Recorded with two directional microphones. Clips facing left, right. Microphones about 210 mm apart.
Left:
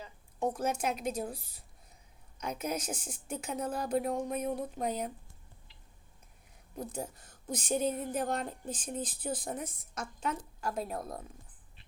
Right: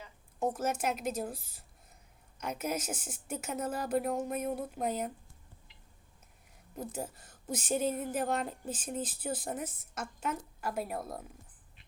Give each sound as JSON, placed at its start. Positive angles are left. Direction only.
{"t": 0.3, "sound": "a woman's voice", "side_deg": -5}
{"t": 5.7, "sound": "a sound", "side_deg": 35}
{"t": 6.7, "sound": "a woman's voice", "side_deg": -5}